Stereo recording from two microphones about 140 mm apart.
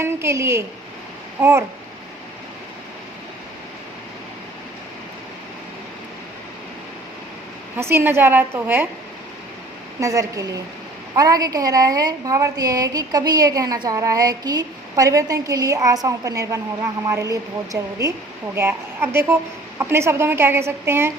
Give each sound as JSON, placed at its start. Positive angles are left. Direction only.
{"t": 0.0, "sound": "a woman's voice", "side_deg": -20}
{"t": 7.8, "sound": "a woman's voice", "side_deg": -15}
{"t": 10.0, "sound": "a woman's voice", "side_deg": -25}